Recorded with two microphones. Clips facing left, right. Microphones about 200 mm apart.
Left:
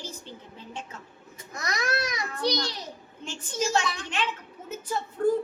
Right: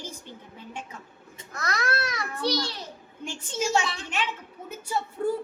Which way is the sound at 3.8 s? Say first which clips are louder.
Even; 25° right (ahead or behind).